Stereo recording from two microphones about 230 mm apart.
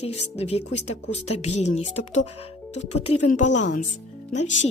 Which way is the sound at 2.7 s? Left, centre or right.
Left.